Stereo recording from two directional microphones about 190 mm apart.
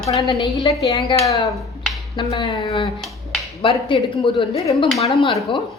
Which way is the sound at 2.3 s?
30° left (ahead or behind).